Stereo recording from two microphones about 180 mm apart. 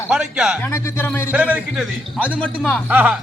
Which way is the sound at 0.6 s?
15° left (ahead or behind).